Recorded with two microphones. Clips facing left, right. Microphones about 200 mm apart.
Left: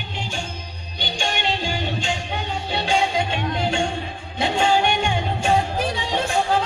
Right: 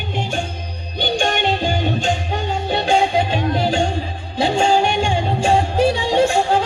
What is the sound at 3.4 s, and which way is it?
Music, 35° right (ahead or behind).